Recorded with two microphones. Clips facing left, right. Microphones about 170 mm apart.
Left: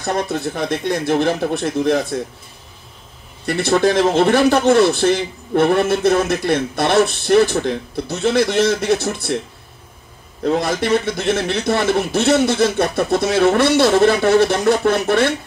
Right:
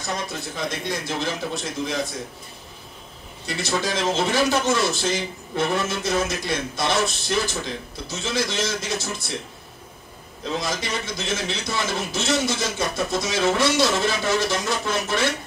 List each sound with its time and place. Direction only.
0.0 s a man's voice: 60° left (ahead or behind)
3.4 s a man's voice: 60° left (ahead or behind)
10.4 s a man's voice: 60° left (ahead or behind)